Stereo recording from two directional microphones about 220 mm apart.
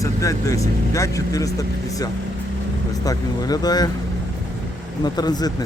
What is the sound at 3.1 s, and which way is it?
Speech, 15° left (ahead or behind).